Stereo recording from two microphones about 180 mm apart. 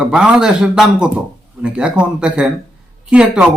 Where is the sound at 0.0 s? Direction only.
5° right (ahead or behind).